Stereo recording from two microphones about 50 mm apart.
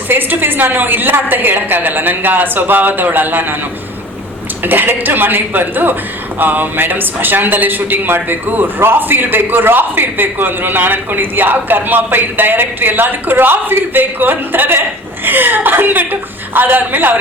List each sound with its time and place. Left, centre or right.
0.1 s a man's voice: right
4.6 s a man's voice: right